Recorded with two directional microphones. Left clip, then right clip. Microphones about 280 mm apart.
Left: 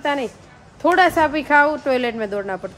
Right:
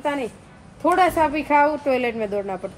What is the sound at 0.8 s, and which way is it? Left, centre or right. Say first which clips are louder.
Speech: left 3 dB; centre.